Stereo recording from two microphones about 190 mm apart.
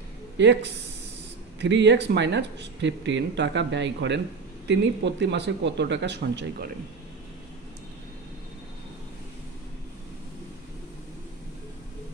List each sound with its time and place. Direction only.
0.4 s speech: 65° right (ahead or behind)